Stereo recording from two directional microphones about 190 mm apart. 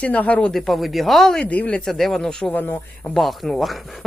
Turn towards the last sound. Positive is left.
turn(degrees=0)  # may be behind; listen again after turning